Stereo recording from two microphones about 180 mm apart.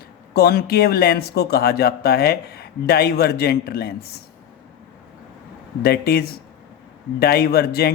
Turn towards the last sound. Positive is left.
turn(degrees=60)  # may be behind; listen again after turning